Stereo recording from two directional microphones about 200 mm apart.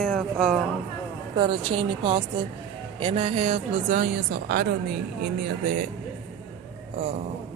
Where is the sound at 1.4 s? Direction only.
25° right (ahead or behind); by 4.6 s 50° right (ahead or behind).